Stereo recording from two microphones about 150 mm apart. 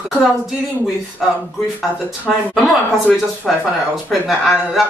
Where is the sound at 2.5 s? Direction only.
Centre (ahead or behind).